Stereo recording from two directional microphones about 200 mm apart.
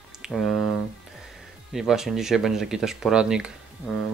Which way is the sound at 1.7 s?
Centre (ahead or behind).